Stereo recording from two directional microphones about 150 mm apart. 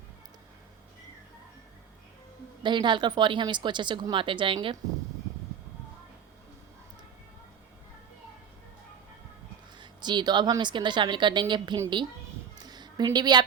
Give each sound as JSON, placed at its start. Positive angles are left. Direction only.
{"t": 2.6, "sound": "a woman's voice", "side_deg": -30}
{"t": 9.7, "sound": "a woman's voice", "side_deg": -30}
{"t": 12.5, "sound": "a sound", "side_deg": -25}